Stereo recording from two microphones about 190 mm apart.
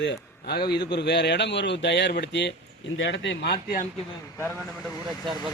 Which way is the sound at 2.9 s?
75° left (ahead or behind).